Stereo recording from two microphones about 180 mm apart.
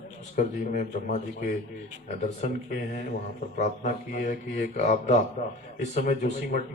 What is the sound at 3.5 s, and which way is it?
Speech, 45° left (ahead or behind).